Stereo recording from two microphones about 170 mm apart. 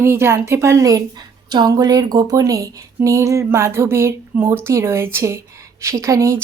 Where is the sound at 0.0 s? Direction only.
15° right (ahead or behind).